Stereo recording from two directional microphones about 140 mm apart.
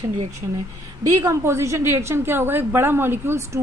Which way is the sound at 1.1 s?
20° right (ahead or behind).